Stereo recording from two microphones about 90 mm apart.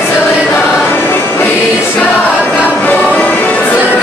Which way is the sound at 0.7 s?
20° left (ahead or behind).